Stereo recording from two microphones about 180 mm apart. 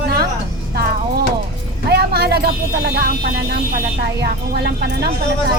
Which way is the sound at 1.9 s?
65° right (ahead or behind).